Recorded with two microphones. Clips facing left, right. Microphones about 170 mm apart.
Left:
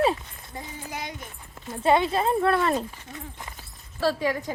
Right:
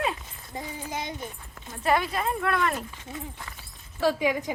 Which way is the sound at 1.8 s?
25° left (ahead or behind).